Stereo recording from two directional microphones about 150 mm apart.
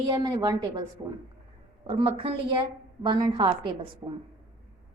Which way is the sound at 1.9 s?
40° right (ahead or behind).